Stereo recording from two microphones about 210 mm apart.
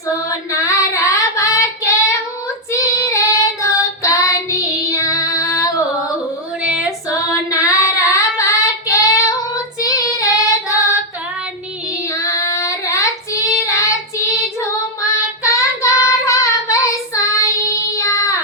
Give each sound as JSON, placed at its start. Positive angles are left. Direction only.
{"t": 0.3, "sound": "child singing", "side_deg": 15}
{"t": 4.9, "sound": "female singing", "side_deg": 15}
{"t": 6.6, "sound": "female singing", "side_deg": -5}
{"t": 7.5, "sound": "child singing", "side_deg": 15}
{"t": 12.1, "sound": "child singing", "side_deg": 15}
{"t": 15.1, "sound": "child singing", "side_deg": 15}